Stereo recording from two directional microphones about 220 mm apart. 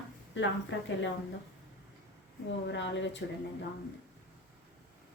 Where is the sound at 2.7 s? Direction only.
55° left (ahead or behind).